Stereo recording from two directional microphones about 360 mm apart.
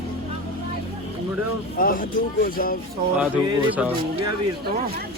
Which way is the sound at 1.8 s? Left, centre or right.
Left.